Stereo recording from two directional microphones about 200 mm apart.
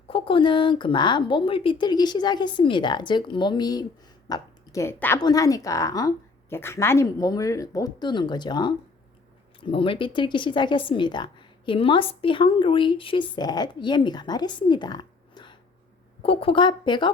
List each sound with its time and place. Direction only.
0.1 s a woman's voice: 25° left (ahead or behind)